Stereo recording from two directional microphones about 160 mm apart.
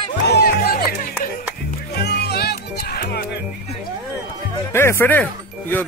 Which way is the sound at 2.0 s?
90° left.